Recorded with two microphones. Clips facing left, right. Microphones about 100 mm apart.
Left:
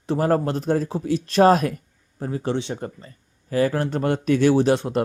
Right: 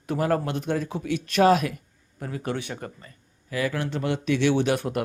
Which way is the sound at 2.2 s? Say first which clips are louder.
Left 5 dB; 30° left (ahead or behind).